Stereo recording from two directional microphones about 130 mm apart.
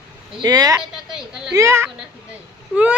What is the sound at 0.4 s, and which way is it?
Speech, 30° right (ahead or behind).